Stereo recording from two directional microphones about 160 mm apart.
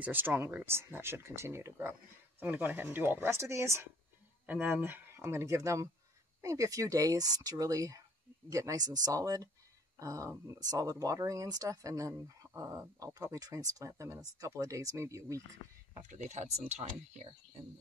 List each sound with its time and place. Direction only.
0.0 s speech: 10° right (ahead or behind)
16.1 s speech: 50° right (ahead or behind)